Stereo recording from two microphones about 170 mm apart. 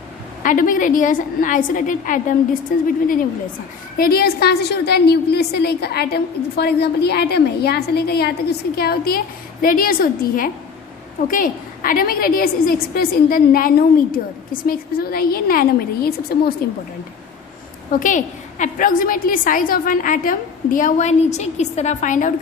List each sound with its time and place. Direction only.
0.4 s a woman's voice: 50° left (ahead or behind)
17.9 s a woman's voice: 50° left (ahead or behind)